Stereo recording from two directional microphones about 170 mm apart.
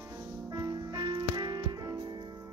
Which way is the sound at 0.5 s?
20° right (ahead or behind).